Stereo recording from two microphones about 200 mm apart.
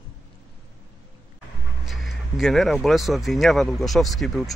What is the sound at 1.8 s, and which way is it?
Speech, centre (ahead or behind).